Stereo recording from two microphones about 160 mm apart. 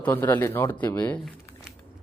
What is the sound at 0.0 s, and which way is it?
A man's voice, 10° left (ahead or behind).